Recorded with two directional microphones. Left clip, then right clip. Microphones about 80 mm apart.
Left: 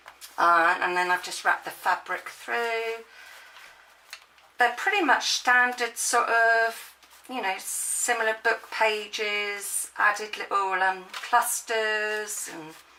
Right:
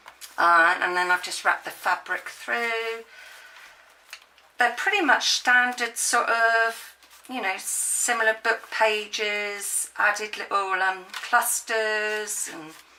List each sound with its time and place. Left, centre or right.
0.3 s speech: right
4.5 s speech: right